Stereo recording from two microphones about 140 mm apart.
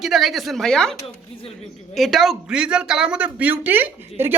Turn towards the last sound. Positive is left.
turn(degrees=-15)  # may be behind; listen again after turning